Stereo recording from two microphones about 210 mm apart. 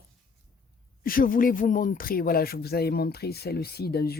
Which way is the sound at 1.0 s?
40° left (ahead or behind).